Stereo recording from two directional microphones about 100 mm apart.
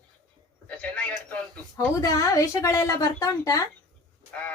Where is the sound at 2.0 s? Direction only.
35° left (ahead or behind).